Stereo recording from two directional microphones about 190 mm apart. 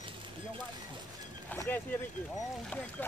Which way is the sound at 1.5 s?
10° left (ahead or behind).